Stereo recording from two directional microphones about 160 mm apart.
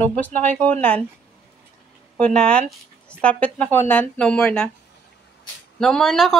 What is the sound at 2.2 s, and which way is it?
Speech, 5° left (ahead or behind).